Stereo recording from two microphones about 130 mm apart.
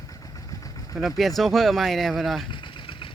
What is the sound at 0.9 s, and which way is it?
Speech, centre (ahead or behind).